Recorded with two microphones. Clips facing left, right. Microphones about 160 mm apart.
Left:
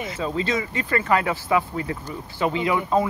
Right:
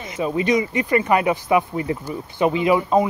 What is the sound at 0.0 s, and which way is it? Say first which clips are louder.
Speech: right 4 dB; 15° right (ahead or behind).